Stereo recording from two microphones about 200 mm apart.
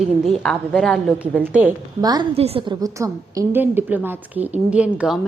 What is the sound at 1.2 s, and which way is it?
Speech, 5° right (ahead or behind).